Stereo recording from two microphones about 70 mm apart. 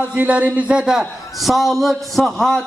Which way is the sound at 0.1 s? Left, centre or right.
Centre.